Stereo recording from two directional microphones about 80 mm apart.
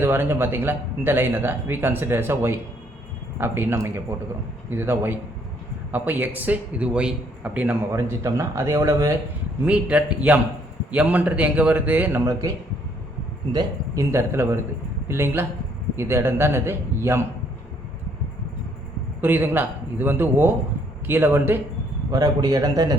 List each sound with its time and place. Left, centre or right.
0.0 s a man's voice: right
7.9 s a man's voice: right
9.6 s a man's voice: centre
12.2 s a man's voice: right
14.0 s a man's voice: right
19.2 s speech: right
22.1 s a man's voice: right